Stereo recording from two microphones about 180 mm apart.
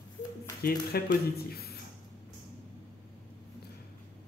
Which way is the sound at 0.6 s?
60° left (ahead or behind).